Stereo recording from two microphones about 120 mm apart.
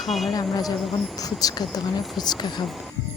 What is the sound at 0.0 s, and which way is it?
Speech, centre (ahead or behind).